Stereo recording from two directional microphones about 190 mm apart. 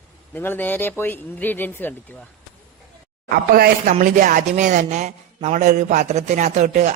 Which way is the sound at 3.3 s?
50° right (ahead or behind).